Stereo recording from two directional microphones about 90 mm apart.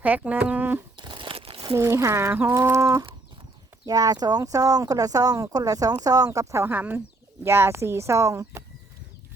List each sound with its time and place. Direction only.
0.0 s speech: 15° right (ahead or behind)
0.9 s crumpling: 60° right (ahead or behind); by 1.6 s 90° right
1.7 s speech: 35° right (ahead or behind)
6.7 s speech: 20° right (ahead or behind); by 8.6 s 35° right (ahead or behind)